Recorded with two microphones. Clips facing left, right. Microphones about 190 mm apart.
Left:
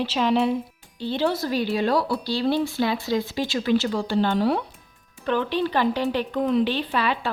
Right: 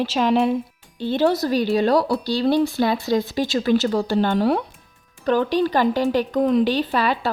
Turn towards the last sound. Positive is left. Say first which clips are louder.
# right 3 dB
turn(degrees=-40)  # may be behind; listen again after turning